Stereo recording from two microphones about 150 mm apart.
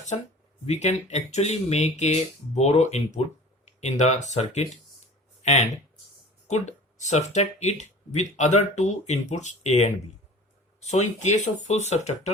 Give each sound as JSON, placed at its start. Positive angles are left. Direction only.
{"t": 0.6, "sound": "speech", "side_deg": 50}